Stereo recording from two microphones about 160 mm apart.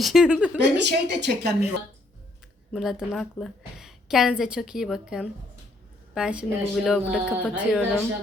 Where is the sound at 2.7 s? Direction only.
Centre (ahead or behind).